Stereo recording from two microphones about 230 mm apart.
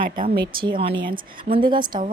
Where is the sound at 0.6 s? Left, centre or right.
Right.